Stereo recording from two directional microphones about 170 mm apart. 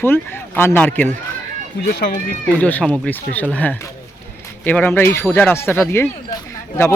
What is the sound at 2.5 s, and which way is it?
Speech, 5° left (ahead or behind).